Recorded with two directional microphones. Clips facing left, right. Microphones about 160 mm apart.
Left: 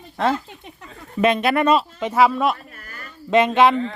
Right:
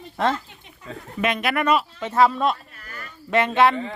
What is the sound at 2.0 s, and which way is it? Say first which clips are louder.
Speech: left 1 dB; 10° left (ahead or behind).